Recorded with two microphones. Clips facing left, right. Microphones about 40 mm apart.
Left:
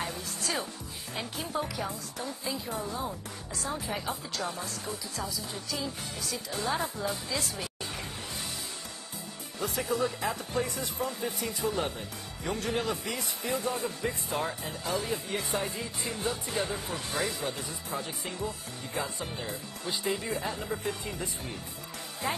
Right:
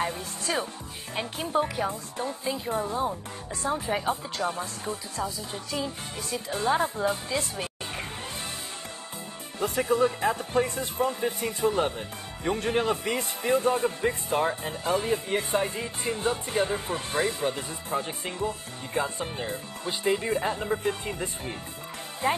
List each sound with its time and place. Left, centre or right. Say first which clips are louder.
0.0 s music: right 5 dB; right
1.1 s a man's voice: right 7 dB; right
9.6 s a man's voice: right 6 dB; right